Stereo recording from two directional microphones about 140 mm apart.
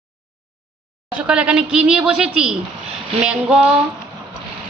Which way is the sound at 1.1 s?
10° right (ahead or behind).